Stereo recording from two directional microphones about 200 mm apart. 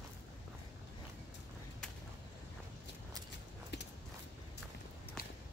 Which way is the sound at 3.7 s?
60° left (ahead or behind).